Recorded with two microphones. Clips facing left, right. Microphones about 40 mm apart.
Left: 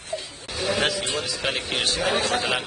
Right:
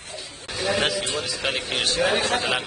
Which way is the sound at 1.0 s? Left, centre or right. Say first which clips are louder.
Even; centre.